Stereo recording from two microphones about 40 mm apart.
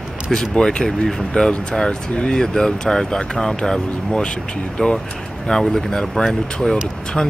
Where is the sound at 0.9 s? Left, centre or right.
Centre.